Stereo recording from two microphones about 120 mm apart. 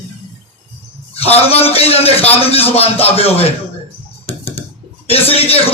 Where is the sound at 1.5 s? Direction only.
55° left (ahead or behind).